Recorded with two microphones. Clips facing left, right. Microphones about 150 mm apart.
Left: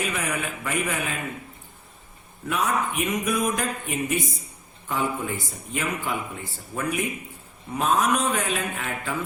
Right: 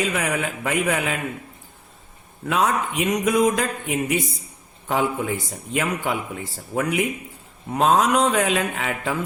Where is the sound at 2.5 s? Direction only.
85° right.